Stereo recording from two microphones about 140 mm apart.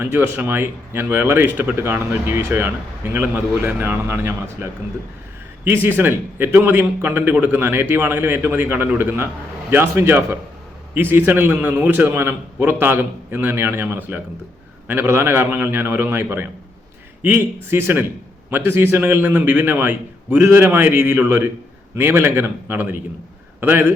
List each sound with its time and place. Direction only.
0.0 s speech: 15° right (ahead or behind)